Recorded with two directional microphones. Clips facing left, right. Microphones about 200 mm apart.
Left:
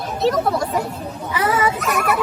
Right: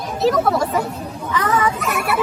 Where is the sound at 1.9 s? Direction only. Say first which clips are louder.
Left 2 dB; 40° left (ahead or behind).